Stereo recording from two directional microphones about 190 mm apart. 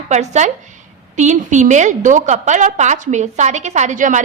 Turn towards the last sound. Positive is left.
turn(degrees=-40)  # may be behind; listen again after turning